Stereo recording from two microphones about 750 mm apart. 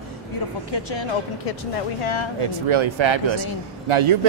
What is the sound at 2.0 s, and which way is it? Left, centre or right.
Speech, left.